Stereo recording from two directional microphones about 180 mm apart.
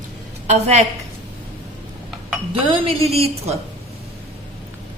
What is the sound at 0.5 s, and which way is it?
Speech, 40° right (ahead or behind).